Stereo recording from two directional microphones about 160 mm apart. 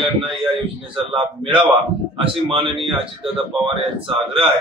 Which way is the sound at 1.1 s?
30° right (ahead or behind).